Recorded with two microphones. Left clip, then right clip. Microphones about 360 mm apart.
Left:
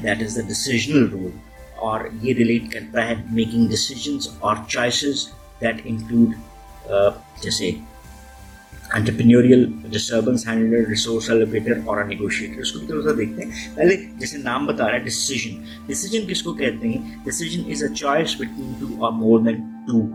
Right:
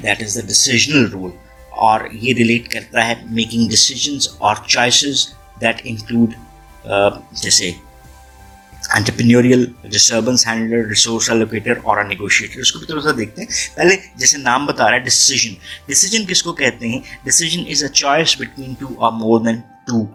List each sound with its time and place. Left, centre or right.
0.0 s speech: centre
6.9 s speech: centre
8.9 s speech: centre